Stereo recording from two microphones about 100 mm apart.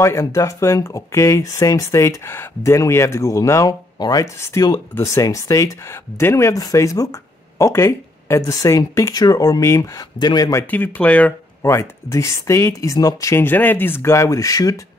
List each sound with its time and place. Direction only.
0.0 s speech: 30° left (ahead or behind)
10.7 s speech: 20° left (ahead or behind)
11.6 s speech: 25° left (ahead or behind)
13.4 s speech: 20° left (ahead or behind); by 14.8 s 35° left (ahead or behind)